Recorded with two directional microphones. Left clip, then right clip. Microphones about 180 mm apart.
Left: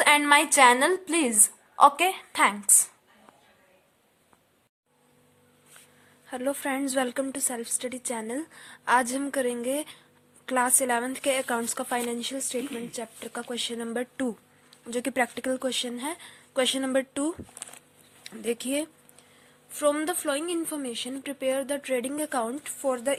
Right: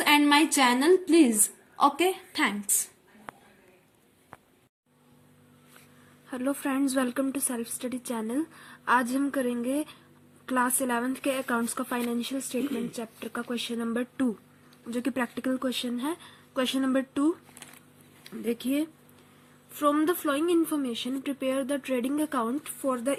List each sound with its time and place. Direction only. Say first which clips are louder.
0.0 s a woman's voice: left 2 dB; 40° left (ahead or behind)
6.2 s a woman's voice: left 1 dB; 20° left (ahead or behind)